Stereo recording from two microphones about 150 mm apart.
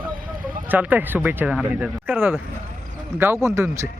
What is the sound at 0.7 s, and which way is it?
Speech, 10° right (ahead or behind).